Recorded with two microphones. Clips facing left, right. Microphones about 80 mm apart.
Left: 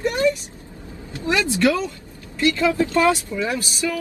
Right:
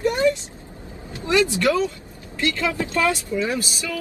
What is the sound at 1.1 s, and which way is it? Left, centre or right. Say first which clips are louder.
Vehicle: right 2 dB; right.